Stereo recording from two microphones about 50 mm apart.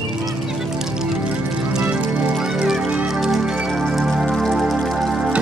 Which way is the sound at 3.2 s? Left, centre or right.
Centre.